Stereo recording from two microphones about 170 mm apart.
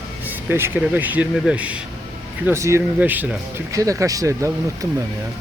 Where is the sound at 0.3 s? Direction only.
10° right (ahead or behind).